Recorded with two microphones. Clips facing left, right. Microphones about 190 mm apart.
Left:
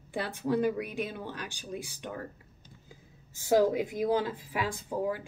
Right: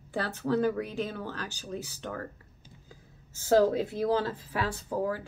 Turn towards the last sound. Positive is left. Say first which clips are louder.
# right 1 dB
turn(degrees=15)  # may be behind; listen again after turning